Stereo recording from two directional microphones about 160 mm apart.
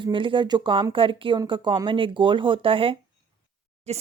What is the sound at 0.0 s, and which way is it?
Speech, 30° right (ahead or behind).